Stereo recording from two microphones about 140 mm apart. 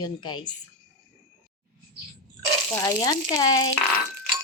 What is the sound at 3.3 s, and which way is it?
Speech, 30° left (ahead or behind).